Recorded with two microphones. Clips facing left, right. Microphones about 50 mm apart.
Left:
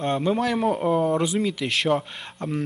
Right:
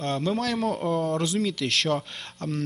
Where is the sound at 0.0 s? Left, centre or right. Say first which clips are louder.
Left 4 dB; centre.